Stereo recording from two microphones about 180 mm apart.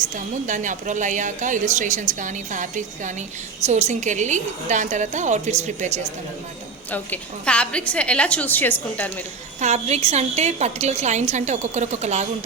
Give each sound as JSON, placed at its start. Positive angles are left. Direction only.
{"t": 0.4, "sound": "a woman's voice", "side_deg": -45}
{"t": 6.9, "sound": "a woman's voice", "side_deg": 10}
{"t": 9.6, "sound": "a woman's voice", "side_deg": -40}